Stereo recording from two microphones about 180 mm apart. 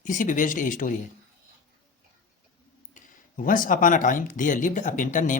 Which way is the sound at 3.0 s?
50° left (ahead or behind).